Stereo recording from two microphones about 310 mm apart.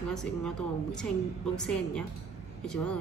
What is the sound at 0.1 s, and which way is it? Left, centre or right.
A woman's voice, centre.